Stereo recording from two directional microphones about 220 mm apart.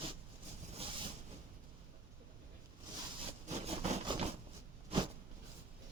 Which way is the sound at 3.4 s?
30° right (ahead or behind).